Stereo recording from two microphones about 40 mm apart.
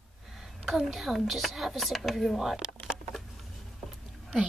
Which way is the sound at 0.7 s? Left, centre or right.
Centre.